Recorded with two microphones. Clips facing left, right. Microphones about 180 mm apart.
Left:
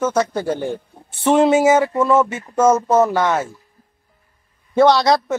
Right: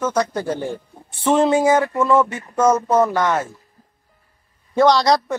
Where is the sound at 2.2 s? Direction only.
10° left (ahead or behind).